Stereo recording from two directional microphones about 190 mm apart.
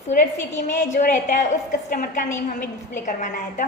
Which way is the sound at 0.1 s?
40° left (ahead or behind).